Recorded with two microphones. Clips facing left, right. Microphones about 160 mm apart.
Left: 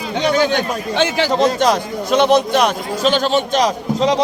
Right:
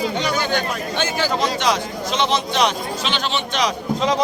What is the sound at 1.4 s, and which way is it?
A man's voice, 50° left (ahead or behind).